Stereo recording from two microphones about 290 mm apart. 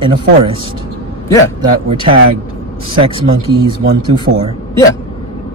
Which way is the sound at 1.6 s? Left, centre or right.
Centre.